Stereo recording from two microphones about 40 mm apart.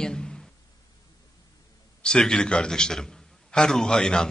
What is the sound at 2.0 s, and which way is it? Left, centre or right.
A man's voice, centre.